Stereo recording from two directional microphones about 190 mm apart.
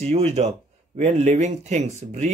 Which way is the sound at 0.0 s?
35° right (ahead or behind).